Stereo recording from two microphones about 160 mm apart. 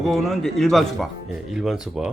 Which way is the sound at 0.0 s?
Centre (ahead or behind).